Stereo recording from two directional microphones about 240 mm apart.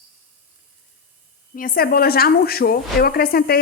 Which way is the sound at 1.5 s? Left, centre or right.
Left.